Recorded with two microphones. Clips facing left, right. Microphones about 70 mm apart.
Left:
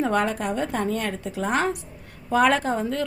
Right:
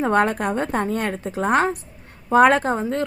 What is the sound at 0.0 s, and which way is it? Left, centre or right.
A woman's voice, right.